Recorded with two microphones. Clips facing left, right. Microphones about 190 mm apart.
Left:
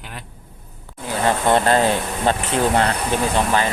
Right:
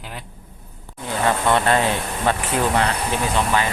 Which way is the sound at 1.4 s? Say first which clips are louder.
Left 4 dB; 30° left (ahead or behind).